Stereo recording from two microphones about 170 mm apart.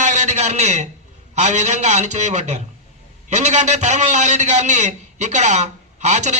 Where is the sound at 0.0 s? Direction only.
45° right (ahead or behind).